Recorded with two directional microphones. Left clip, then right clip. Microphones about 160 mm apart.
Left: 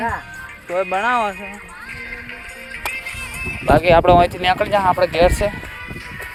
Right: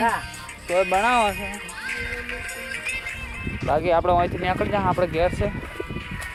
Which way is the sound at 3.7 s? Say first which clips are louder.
Left 8 dB; 50° left (ahead or behind).